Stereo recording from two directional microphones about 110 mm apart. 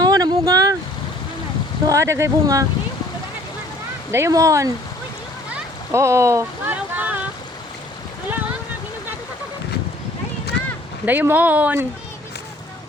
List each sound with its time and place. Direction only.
0.0 s a sound: 35° right (ahead or behind)
1.9 s speech: 25° right (ahead or behind)
4.1 s speech: 25° right (ahead or behind)
5.9 s speech: 25° right (ahead or behind)
6.7 s a sound: 15° right (ahead or behind)
11.0 s speech: 15° right (ahead or behind)